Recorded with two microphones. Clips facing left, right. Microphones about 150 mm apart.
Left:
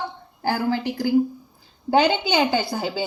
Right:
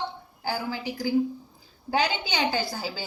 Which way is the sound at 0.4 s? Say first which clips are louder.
Left 8 dB; 60° left (ahead or behind).